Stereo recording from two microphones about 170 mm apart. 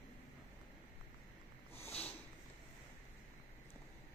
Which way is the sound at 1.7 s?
35° left (ahead or behind).